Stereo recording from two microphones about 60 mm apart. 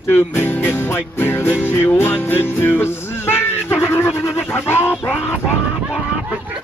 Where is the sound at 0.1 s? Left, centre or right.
Left.